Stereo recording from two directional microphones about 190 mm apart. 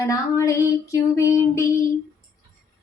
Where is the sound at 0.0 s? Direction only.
15° left (ahead or behind).